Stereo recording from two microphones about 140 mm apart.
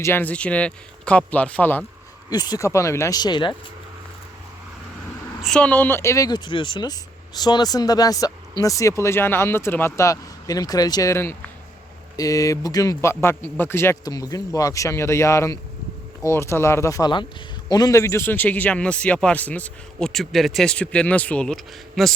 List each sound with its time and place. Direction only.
0.0 s a man's voice: 15° left (ahead or behind)
2.3 s speech: 30° left (ahead or behind)
5.4 s a man's voice: 5° left (ahead or behind)